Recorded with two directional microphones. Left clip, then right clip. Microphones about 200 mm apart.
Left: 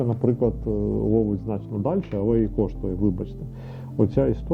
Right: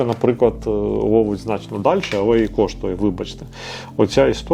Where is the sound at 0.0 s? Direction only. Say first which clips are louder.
Right 7 dB; 10° right (ahead or behind).